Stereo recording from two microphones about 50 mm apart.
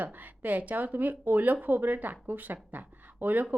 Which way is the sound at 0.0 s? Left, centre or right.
Right.